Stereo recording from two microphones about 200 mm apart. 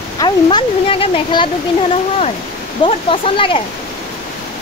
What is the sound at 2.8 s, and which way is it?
Speech, 25° left (ahead or behind).